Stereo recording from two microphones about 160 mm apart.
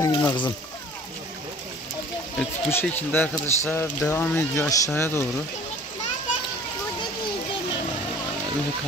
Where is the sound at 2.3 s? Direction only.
15° left (ahead or behind).